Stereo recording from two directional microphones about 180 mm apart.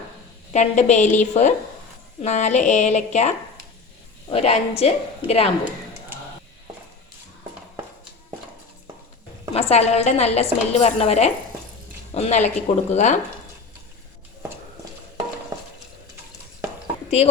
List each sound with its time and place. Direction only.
0.5 s a woman's voice: 40° left (ahead or behind)
9.5 s a woman's voice: 35° left (ahead or behind)